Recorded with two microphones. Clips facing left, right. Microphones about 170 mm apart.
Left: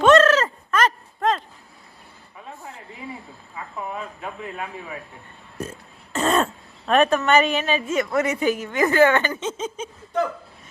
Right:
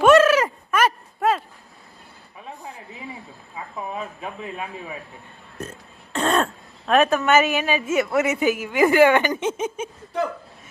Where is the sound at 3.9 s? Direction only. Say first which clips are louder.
Right 1 dB; 20° right (ahead or behind).